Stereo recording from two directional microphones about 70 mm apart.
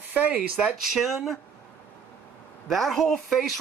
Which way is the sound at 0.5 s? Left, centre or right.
Centre.